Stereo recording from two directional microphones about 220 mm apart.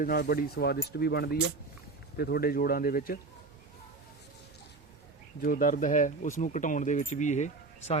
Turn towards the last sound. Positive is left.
turn(degrees=30)  # may be behind; listen again after turning